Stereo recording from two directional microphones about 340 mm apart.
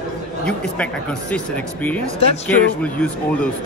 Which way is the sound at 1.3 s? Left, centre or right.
Centre.